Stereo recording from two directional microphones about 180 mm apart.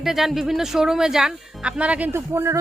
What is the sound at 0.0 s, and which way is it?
Speech, centre (ahead or behind).